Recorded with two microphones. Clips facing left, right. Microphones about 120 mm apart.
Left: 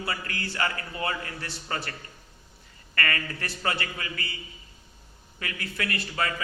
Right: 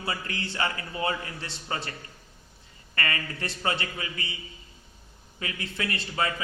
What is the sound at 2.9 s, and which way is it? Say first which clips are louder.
A man's voice: left 1 dB; 20° right (ahead or behind).